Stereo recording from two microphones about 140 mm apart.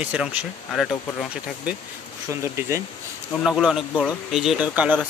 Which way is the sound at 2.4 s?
20° right (ahead or behind).